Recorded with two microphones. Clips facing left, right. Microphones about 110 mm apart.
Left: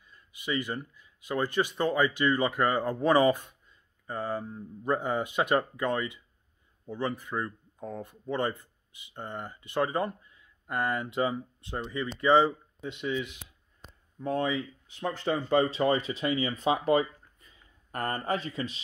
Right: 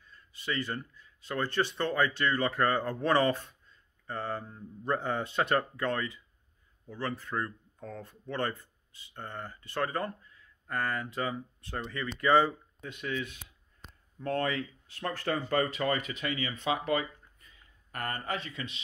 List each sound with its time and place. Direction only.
0.0 s speech: 15° left (ahead or behind); by 18.8 s 35° left (ahead or behind)